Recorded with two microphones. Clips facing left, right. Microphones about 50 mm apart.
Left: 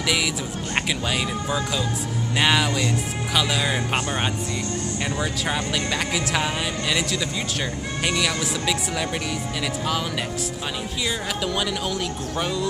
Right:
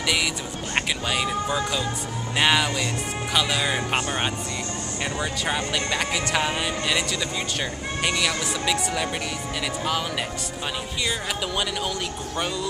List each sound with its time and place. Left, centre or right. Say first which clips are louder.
0.7 s speech: even; centre
12.4 s speech: left 2 dB; centre